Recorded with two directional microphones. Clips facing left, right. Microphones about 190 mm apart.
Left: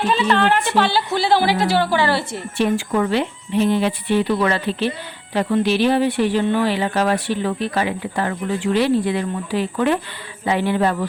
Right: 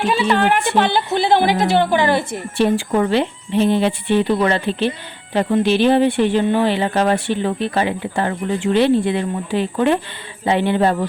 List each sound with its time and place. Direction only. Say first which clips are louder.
0.1 s a woman's voice: right 1 dB; 10° right (ahead or behind)
2.6 s speech: right 2 dB; 30° right (ahead or behind)